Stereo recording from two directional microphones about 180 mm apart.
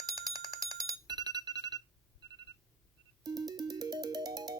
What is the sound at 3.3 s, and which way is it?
Music, 20° right (ahead or behind).